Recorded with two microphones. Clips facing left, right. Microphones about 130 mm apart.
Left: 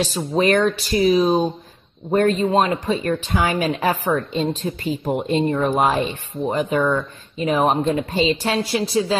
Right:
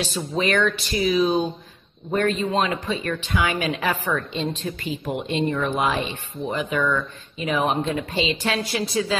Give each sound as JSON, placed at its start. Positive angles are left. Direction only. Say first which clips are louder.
{"t": 0.0, "sound": "speech", "louder": "left 5 dB", "side_deg": 40}